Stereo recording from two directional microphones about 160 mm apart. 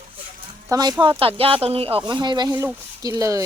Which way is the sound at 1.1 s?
35° right (ahead or behind).